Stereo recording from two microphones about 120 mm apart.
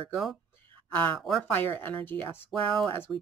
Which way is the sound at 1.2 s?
Centre (ahead or behind).